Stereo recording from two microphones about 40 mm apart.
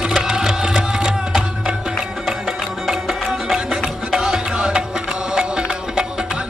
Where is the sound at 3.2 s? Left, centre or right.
Centre.